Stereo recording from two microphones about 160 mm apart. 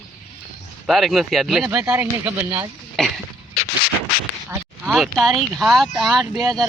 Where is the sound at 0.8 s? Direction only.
Centre (ahead or behind).